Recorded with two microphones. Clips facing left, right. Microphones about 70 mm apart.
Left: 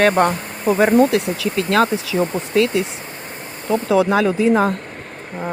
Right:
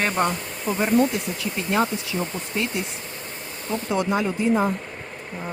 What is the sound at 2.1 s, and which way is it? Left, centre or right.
Speech, left.